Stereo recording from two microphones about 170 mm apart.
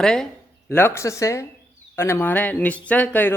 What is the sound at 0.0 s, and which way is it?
Speech, 5° left (ahead or behind).